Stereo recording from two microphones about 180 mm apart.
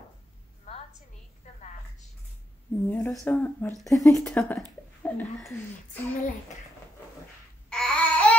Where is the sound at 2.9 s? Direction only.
10° left (ahead or behind).